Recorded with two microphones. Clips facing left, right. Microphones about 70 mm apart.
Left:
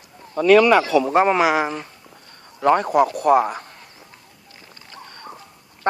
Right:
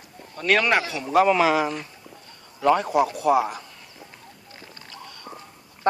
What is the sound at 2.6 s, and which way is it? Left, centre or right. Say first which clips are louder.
A man's voice: left 3 dB; left.